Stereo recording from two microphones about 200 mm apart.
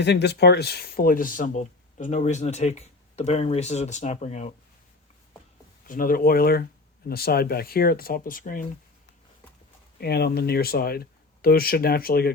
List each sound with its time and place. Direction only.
0.0 s speech: 55° left (ahead or behind); by 4.5 s 35° left (ahead or behind)
5.9 s speech: 45° left (ahead or behind)
10.0 s speech: 55° left (ahead or behind)